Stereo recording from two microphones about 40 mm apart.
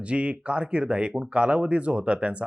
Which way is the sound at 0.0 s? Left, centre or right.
Right.